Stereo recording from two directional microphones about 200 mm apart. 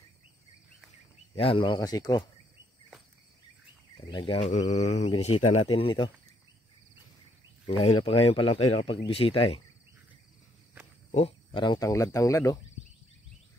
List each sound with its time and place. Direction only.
1.3 s speech: 25° left (ahead or behind)
4.1 s speech: 25° left (ahead or behind)
7.6 s speech: 25° left (ahead or behind)
11.1 s speech: 30° left (ahead or behind); by 12.5 s 15° left (ahead or behind)